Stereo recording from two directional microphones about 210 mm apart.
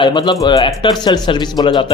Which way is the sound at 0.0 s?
20° left (ahead or behind).